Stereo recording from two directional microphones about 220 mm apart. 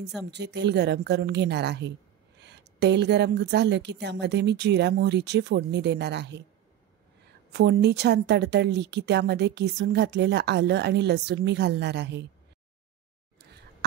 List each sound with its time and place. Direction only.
0.3 s a woman's voice: 50° right (ahead or behind)
7.5 s a woman's voice: 50° right (ahead or behind)